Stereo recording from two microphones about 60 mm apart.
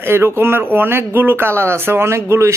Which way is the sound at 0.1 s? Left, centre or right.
Right.